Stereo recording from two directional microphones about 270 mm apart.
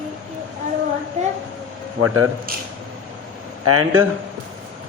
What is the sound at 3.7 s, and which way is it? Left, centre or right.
Speech, right.